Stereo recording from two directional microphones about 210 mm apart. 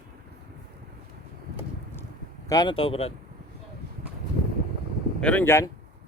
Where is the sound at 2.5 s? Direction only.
20° left (ahead or behind).